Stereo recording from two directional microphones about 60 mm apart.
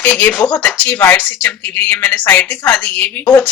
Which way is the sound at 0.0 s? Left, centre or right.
Left.